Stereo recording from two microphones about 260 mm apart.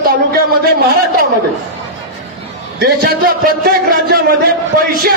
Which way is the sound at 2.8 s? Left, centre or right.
Right.